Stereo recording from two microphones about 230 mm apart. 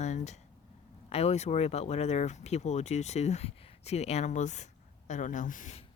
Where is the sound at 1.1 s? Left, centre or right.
Left.